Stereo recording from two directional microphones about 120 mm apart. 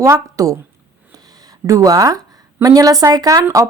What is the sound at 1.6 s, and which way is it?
A woman's voice, 25° right (ahead or behind).